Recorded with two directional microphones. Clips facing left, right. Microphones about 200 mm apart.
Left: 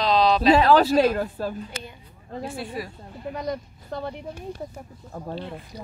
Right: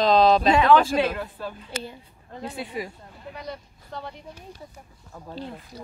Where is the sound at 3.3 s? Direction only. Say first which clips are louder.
Left 7 dB; 45° left (ahead or behind).